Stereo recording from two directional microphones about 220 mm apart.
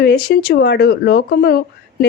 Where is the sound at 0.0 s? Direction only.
50° left (ahead or behind).